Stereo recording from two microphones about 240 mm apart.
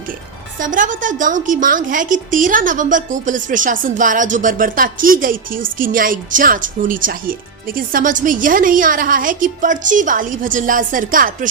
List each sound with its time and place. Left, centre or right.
0.6 s a woman's voice: right